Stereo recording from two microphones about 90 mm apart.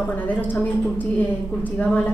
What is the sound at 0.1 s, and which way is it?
A woman's voice, 20° left (ahead or behind).